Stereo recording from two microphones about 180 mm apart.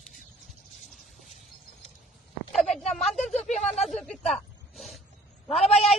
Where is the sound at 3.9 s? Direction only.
Centre (ahead or behind).